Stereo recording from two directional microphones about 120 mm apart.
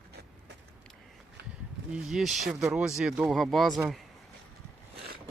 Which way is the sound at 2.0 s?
Centre (ahead or behind).